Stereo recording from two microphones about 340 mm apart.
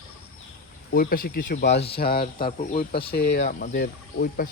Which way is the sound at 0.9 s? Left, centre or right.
Left.